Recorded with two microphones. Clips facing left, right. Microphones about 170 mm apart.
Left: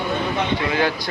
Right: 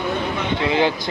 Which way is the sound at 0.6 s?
20° right (ahead or behind).